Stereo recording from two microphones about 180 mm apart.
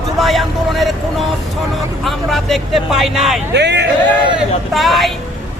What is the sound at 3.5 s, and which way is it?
Speech, 70° right (ahead or behind).